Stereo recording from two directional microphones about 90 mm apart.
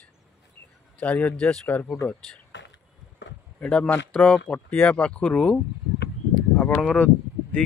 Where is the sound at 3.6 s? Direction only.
10° left (ahead or behind).